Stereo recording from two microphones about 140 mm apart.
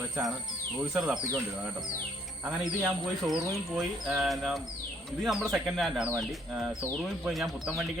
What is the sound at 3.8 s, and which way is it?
Speech, 5° right (ahead or behind).